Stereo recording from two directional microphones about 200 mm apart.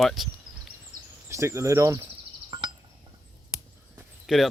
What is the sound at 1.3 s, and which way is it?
Speech, 15° right (ahead or behind).